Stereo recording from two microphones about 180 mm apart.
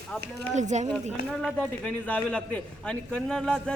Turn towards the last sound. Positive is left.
turn(degrees=5)  # may be behind; listen again after turning